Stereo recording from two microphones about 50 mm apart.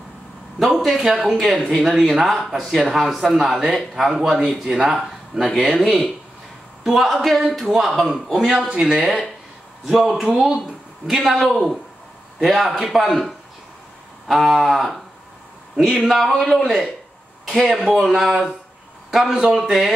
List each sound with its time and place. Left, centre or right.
0.7 s a sound: centre
1.0 s speech: centre
3.6 s speech: centre
4.0 s speech: centre
8.6 s speech: centre
12.4 s speech: centre
13.0 s speech: centre
17.6 s speech: centre